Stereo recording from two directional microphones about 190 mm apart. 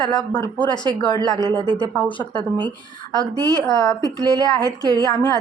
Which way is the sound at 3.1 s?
15° right (ahead or behind).